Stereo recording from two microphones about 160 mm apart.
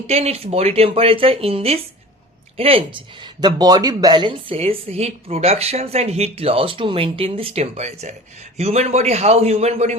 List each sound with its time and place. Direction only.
0.1 s a woman's voice: 40° right (ahead or behind)
3.4 s a woman's voice: 25° right (ahead or behind); by 9.9 s 40° right (ahead or behind)